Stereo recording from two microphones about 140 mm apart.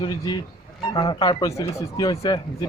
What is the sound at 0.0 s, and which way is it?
Speech, 30° left (ahead or behind).